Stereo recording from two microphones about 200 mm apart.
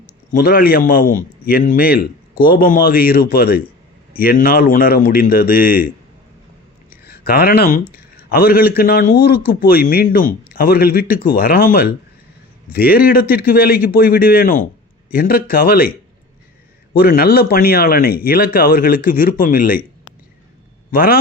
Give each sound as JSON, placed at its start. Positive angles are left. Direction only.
{"t": 0.3, "sound": "a man's voice", "side_deg": 45}
{"t": 7.0, "sound": "a man's voice", "side_deg": 50}
{"t": 16.9, "sound": "a man's voice", "side_deg": 45}
{"t": 20.9, "sound": "a man's voice", "side_deg": 45}